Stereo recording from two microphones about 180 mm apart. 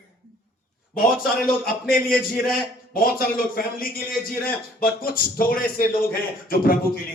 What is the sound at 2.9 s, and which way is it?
A man's voice, 55° left (ahead or behind).